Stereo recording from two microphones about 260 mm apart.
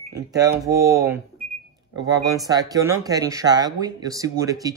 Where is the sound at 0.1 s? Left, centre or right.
Centre.